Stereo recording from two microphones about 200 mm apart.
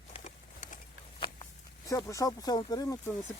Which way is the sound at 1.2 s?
20° left (ahead or behind).